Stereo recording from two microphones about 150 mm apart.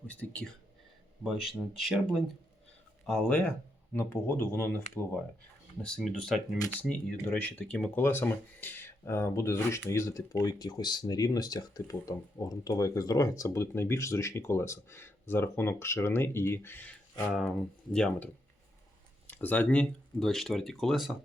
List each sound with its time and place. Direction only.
0.1 s speech: 10° left (ahead or behind)
1.2 s speech: 5° right (ahead or behind); by 4.8 s 15° left (ahead or behind)
5.8 s speech: 5° left (ahead or behind)
19.3 s speech: 10° left (ahead or behind)